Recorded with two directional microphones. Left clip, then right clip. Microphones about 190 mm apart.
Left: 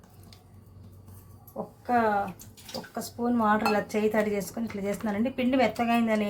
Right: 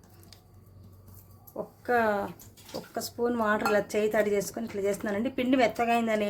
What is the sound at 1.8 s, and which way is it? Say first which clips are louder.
Speech: left 1 dB; 55° right (ahead or behind).